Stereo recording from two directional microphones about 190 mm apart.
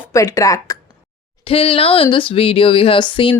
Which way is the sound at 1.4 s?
30° left (ahead or behind).